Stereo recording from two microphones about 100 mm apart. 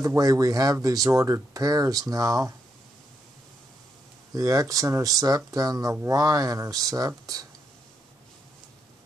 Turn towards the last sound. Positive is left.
turn(degrees=-35)  # may be behind; listen again after turning